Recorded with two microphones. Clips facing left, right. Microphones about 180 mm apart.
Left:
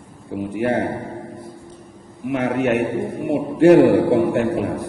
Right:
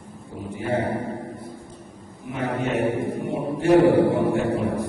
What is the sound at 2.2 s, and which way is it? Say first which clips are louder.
Music: left 7 dB; 75° left (ahead or behind).